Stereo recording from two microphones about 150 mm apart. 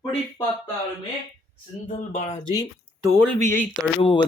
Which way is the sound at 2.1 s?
40° left (ahead or behind).